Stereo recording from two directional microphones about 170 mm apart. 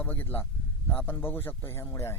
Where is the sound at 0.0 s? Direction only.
10° left (ahead or behind).